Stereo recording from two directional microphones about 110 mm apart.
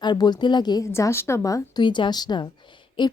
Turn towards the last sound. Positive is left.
turn(degrees=45)  # may be behind; listen again after turning